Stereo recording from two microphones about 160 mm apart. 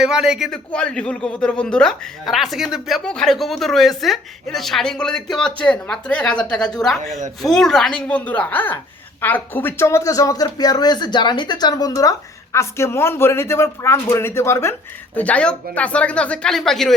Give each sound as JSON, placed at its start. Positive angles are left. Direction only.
{"t": 0.0, "sound": "a man's voice", "side_deg": -5}